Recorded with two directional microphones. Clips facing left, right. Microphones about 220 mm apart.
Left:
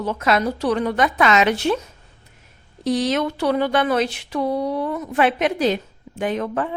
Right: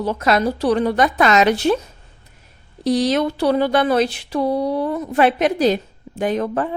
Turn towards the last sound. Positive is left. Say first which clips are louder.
# right 3 dB
turn(degrees=-35)  # may be behind; listen again after turning